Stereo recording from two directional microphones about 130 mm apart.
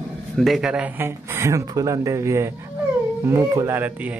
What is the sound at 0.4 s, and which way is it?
Speech, centre (ahead or behind).